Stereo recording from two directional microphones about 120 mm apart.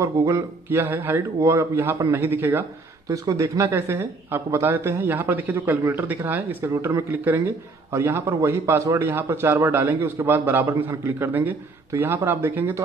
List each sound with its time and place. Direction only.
0.0 s a man's voice: 25° right (ahead or behind)